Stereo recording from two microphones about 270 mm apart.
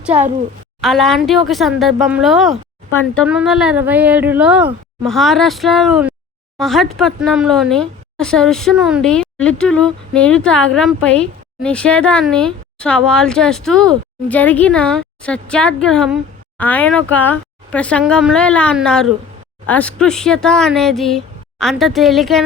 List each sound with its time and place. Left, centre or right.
0.1 s a woman's voice: right
0.8 s speech: centre